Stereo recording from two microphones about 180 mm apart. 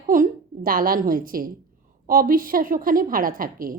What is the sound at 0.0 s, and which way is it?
A woman's voice, 50° right (ahead or behind).